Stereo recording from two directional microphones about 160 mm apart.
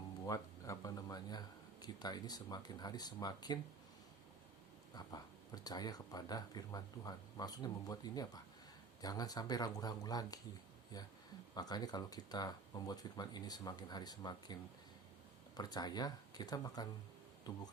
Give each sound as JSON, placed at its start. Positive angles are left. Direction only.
{"t": 0.3, "sound": "speech", "side_deg": 20}
{"t": 4.9, "sound": "speech", "side_deg": 25}